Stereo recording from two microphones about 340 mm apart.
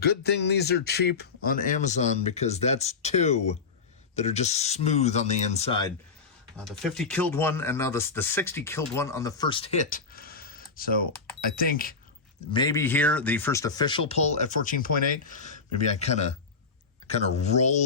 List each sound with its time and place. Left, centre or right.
0.0 s speech: left
6.7 s speech: centre; by 11.9 s left
12.5 s speech: centre